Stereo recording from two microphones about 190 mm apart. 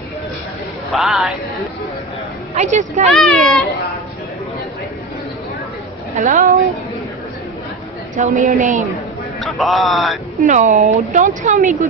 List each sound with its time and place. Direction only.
0.9 s a man's voice: centre (ahead or behind)
2.5 s speech: 40° right (ahead or behind)
3.1 s a man's voice: centre (ahead or behind)
6.1 s a woman's voice: 45° right (ahead or behind)
8.2 s speech: 45° right (ahead or behind)
9.4 s a man's voice: centre (ahead or behind)
10.4 s speech: 40° right (ahead or behind)